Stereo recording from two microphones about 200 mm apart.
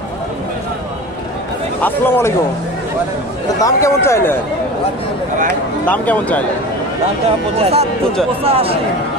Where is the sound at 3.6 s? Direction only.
15° left (ahead or behind).